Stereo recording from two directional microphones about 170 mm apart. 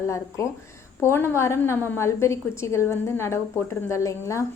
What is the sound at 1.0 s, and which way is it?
A woman's voice, 15° left (ahead or behind).